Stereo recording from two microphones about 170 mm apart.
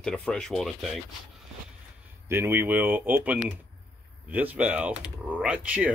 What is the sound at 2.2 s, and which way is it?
Speech, 15° right (ahead or behind).